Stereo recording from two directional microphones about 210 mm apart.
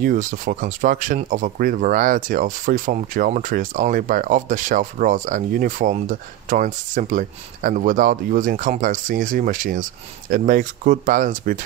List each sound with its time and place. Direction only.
0.0 s speech: 40° right (ahead or behind)